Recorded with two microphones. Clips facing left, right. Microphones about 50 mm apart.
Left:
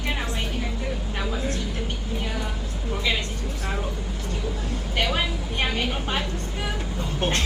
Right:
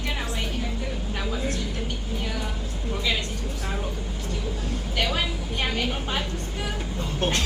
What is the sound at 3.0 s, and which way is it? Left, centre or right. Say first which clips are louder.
Vehicle: left 1 dB; centre.